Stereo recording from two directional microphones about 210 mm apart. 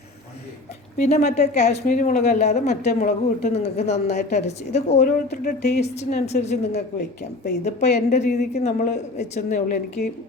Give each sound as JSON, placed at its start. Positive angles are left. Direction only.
{"t": 0.9, "sound": "a woman's voice", "side_deg": 35}
{"t": 6.7, "sound": "speech", "side_deg": 50}
{"t": 7.6, "sound": "a woman's voice", "side_deg": 35}